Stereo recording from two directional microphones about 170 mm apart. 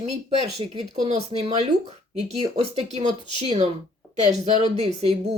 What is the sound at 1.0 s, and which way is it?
Speech, 40° right (ahead or behind).